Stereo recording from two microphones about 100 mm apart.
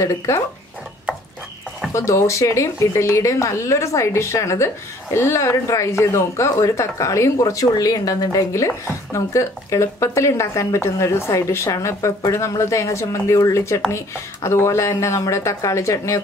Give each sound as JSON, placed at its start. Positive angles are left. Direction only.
{"t": 0.0, "sound": "speech", "side_deg": 30}
{"t": 2.0, "sound": "speech", "side_deg": 30}